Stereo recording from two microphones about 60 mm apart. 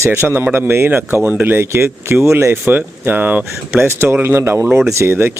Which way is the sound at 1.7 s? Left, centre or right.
Right.